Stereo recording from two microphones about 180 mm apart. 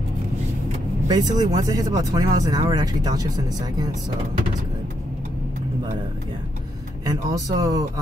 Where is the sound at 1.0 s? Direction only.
20° right (ahead or behind).